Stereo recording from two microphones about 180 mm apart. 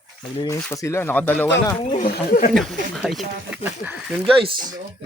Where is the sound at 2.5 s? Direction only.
Centre (ahead or behind).